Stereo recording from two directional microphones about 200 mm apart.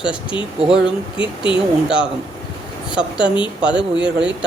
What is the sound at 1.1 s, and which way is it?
Speech, 25° left (ahead or behind).